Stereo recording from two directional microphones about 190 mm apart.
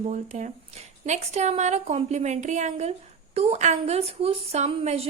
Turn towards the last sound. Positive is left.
turn(degrees=-35)  # may be behind; listen again after turning